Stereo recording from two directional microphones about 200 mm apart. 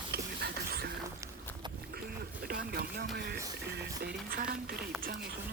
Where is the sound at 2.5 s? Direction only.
50° right (ahead or behind).